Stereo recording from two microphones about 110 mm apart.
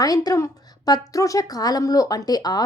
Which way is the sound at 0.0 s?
35° left (ahead or behind).